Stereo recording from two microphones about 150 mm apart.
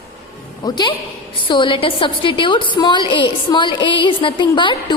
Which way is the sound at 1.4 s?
35° left (ahead or behind).